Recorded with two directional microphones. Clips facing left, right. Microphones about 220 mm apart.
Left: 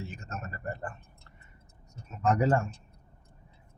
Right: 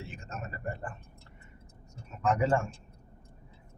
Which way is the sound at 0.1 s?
40° left (ahead or behind).